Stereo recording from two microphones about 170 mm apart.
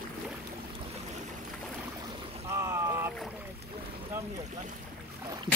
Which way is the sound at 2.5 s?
15° right (ahead or behind).